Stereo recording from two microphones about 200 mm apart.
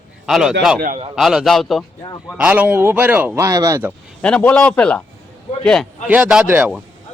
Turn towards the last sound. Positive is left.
turn(degrees=-5)  # may be behind; listen again after turning